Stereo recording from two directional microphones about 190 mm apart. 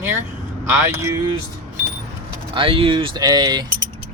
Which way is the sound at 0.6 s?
15° right (ahead or behind).